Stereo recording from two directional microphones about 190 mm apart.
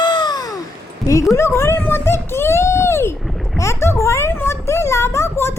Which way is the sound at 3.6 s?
15° left (ahead or behind).